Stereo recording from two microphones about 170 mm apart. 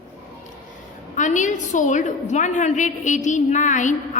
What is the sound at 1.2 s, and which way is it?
A woman's voice, 45° left (ahead or behind).